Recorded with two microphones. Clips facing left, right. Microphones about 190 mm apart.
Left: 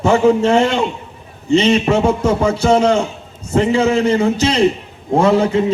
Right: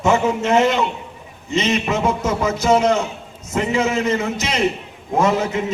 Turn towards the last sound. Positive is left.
turn(degrees=30)  # may be behind; listen again after turning